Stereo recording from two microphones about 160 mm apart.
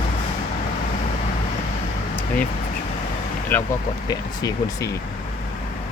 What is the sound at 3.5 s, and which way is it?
Speech, 10° left (ahead or behind).